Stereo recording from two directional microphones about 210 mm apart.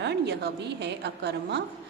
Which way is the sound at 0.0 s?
55° right (ahead or behind).